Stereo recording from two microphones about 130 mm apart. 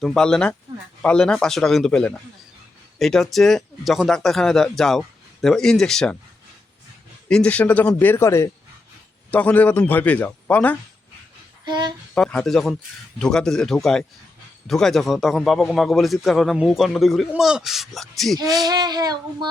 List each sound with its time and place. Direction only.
0.0 s a man's voice: 5° left (ahead or behind)
7.3 s a man's voice: 10° left (ahead or behind)
11.6 s speech: 35° right (ahead or behind)
12.1 s speech: 5° left (ahead or behind)
18.5 s child singing: 30° right (ahead or behind)